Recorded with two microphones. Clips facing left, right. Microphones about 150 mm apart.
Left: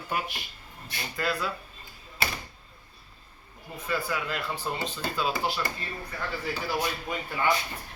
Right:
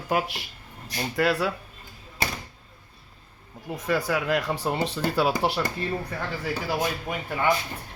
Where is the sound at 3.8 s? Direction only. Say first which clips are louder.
Right 6 dB; 90° right; by 5.3 s 70° right (ahead or behind).